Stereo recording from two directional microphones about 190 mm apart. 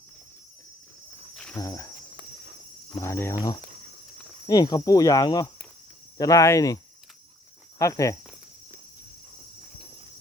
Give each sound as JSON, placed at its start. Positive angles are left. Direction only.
{"t": 1.5, "sound": "speech", "side_deg": 15}
{"t": 2.9, "sound": "speech", "side_deg": 15}
{"t": 4.4, "sound": "cricket", "side_deg": 20}
{"t": 6.1, "sound": "speech", "side_deg": 15}
{"t": 7.8, "sound": "speech", "side_deg": 15}